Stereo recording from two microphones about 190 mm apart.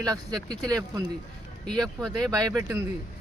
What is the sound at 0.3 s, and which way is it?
Speech, 5° left (ahead or behind).